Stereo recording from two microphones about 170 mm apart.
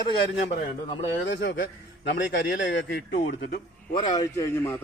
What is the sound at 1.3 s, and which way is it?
Speech, 80° left.